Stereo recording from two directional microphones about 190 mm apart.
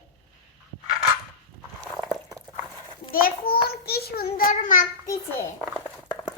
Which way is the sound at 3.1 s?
50° left (ahead or behind).